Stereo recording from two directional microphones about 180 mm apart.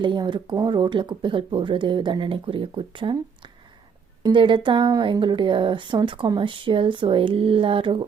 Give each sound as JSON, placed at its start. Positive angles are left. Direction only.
{"t": 0.0, "sound": "speech", "side_deg": -25}